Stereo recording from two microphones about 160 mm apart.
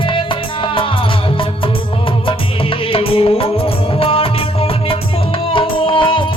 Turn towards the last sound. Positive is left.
turn(degrees=30)  # may be behind; listen again after turning